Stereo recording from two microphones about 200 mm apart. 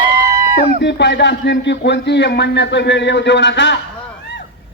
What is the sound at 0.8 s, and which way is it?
A man's voice, 60° left (ahead or behind).